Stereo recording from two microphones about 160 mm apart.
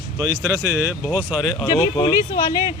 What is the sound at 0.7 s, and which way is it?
Speech, 10° right (ahead or behind).